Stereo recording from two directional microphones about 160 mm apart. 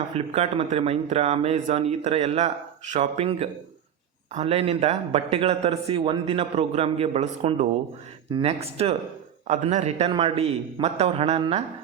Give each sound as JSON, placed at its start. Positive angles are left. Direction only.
{"t": 0.1, "sound": "a man's voice", "side_deg": -40}